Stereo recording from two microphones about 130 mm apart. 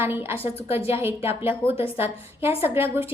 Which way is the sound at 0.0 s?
20° right (ahead or behind).